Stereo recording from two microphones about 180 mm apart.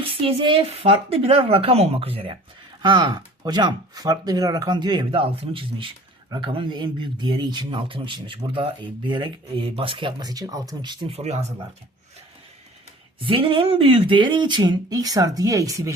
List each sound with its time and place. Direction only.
0.0 s speech: 30° right (ahead or behind)
13.1 s speech: 30° right (ahead or behind)